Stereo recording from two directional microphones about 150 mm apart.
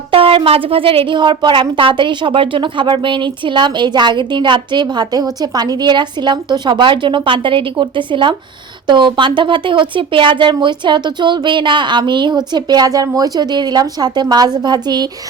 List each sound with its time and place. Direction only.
0.1 s a woman's voice: 35° right (ahead or behind)